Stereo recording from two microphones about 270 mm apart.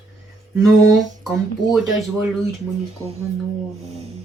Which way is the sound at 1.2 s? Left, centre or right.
Centre.